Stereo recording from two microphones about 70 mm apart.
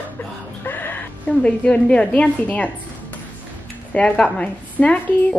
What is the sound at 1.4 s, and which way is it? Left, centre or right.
Speech, centre.